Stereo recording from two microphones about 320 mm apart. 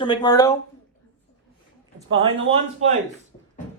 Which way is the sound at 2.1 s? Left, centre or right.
Centre.